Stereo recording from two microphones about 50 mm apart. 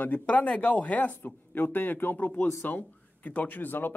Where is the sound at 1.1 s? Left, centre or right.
Left.